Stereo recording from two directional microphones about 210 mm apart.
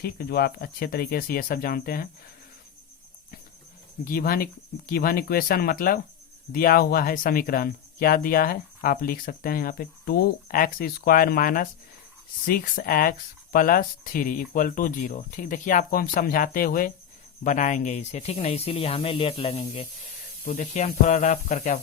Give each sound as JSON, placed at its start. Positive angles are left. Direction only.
{"t": 0.0, "sound": "speech", "side_deg": 45}
{"t": 4.0, "sound": "speech", "side_deg": 45}